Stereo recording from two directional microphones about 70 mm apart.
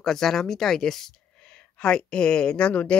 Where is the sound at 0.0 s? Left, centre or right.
Centre.